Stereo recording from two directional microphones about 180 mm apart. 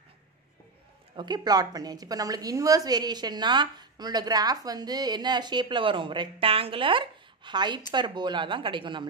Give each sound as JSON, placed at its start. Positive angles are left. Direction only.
{"t": 1.1, "sound": "a woman's voice", "side_deg": -25}